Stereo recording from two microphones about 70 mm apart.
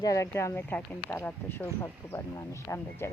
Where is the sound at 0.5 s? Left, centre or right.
Left.